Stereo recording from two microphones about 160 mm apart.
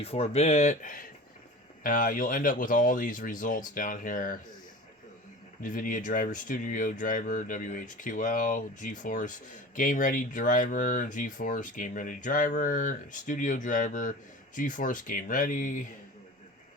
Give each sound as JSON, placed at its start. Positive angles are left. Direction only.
{"t": 0.0, "sound": "speech", "side_deg": 40}
{"t": 5.6, "sound": "speech", "side_deg": 55}